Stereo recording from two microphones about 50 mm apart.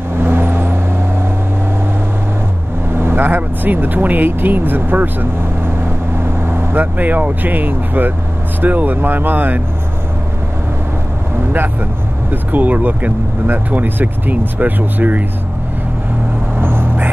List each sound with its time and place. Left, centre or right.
0.2 s vehicle: right
2.9 s speech: right
12.3 s speech: right
16.5 s vehicle: right